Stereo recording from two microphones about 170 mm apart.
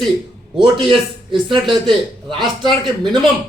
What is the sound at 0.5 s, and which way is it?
A man's voice, 25° right (ahead or behind).